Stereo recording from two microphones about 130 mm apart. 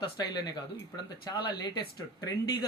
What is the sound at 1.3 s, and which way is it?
Speech, 30° left (ahead or behind).